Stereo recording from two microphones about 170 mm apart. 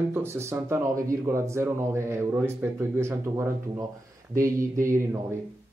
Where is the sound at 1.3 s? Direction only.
15° right (ahead or behind).